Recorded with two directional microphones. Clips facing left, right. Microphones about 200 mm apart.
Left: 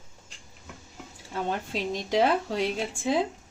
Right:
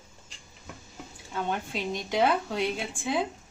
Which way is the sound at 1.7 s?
35° left (ahead or behind).